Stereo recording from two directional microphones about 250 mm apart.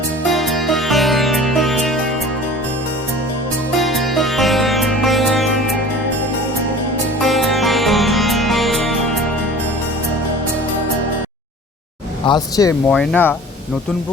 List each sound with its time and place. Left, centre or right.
0.3 s music: centre
3.8 s music: centre
7.3 s music: centre
12.2 s speech: centre
12.9 s speech: centre